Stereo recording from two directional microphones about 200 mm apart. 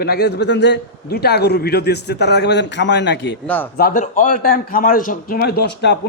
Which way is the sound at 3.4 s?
10° left (ahead or behind).